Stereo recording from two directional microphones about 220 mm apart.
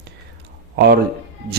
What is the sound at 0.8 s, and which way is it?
Speech, 45° right (ahead or behind).